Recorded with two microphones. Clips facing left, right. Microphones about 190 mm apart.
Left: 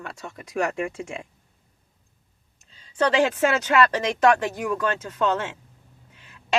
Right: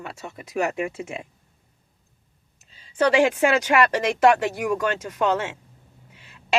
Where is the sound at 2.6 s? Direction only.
10° right (ahead or behind).